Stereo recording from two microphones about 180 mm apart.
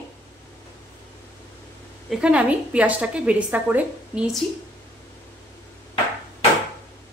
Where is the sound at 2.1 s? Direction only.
5° right (ahead or behind).